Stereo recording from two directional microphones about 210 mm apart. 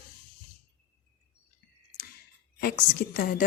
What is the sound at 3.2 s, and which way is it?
Speech, 45° left (ahead or behind).